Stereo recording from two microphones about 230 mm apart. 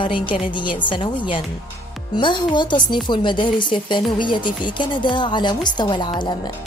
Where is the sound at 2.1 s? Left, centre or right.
Centre.